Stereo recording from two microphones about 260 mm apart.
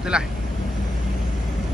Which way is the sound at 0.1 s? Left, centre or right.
Centre.